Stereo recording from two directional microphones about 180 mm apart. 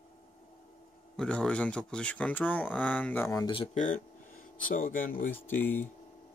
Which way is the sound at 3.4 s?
30° left (ahead or behind).